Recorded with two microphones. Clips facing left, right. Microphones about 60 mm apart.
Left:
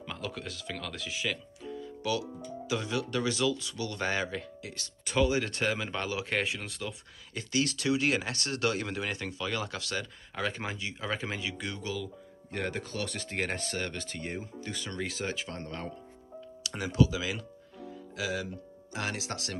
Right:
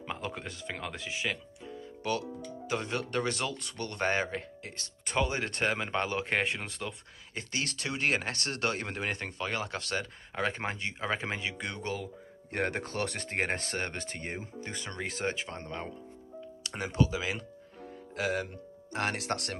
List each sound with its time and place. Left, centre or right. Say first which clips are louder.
0.0 s speech: right 1 dB; right
2.6 s speech: left 1 dB; right
13.4 s speech: right 1 dB; right
17.8 s music: right 2 dB; right
18.9 s speech: right 3 dB; right